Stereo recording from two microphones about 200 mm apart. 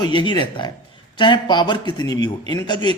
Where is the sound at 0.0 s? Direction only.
25° left (ahead or behind).